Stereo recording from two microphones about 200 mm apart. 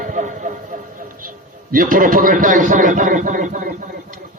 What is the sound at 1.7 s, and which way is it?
A man's voice, 45° right (ahead or behind).